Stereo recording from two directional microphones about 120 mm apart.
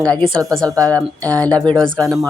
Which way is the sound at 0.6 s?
30° right (ahead or behind).